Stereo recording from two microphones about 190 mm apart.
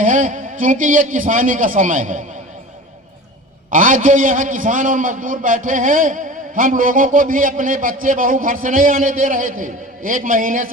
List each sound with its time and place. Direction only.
0.0 s a man's voice: 40° right (ahead or behind)
3.7 s a man's voice: 45° right (ahead or behind)